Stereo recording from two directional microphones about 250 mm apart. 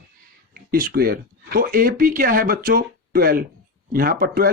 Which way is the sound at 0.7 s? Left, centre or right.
Right.